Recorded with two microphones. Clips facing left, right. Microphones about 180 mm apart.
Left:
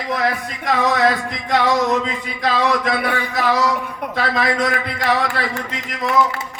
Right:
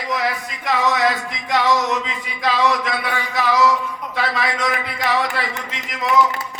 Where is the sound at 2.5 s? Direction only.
50° left (ahead or behind).